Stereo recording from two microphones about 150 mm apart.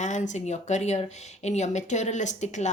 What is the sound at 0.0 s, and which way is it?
Speech, 55° left (ahead or behind).